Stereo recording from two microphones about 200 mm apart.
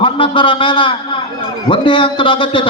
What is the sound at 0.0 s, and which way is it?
A man's voice, 25° left (ahead or behind).